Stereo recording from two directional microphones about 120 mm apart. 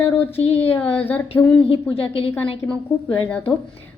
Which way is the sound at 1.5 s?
50° left (ahead or behind).